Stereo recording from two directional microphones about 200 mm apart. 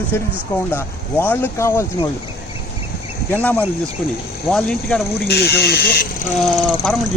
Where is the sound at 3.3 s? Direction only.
10° left (ahead or behind).